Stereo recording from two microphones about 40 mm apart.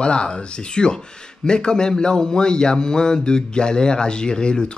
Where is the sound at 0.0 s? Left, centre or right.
Left.